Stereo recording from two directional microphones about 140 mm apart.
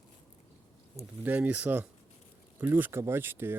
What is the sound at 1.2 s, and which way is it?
Speech, 10° right (ahead or behind).